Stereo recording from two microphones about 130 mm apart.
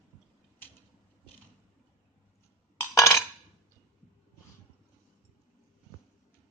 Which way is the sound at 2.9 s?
20° left (ahead or behind).